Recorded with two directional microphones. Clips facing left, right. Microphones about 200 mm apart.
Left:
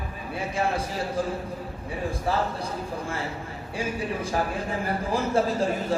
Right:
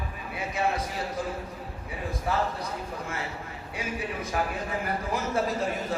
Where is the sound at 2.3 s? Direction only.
30° left (ahead or behind).